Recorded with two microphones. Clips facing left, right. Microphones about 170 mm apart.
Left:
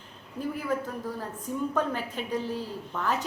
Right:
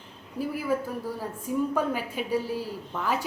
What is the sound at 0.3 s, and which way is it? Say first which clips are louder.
A woman's voice: right 2 dB; 10° right (ahead or behind).